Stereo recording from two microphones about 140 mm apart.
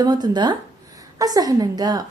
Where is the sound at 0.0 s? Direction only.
30° right (ahead or behind).